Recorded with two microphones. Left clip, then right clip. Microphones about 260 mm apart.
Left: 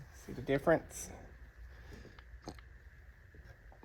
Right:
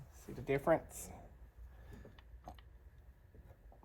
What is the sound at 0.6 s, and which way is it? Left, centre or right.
Speech, left.